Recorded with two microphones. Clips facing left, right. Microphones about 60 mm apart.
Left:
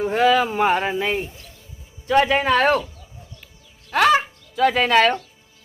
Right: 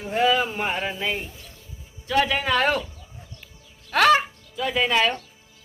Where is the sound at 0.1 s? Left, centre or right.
Left.